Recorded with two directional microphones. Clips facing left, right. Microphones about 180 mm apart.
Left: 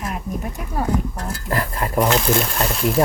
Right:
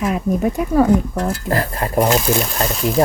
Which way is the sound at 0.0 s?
90° right.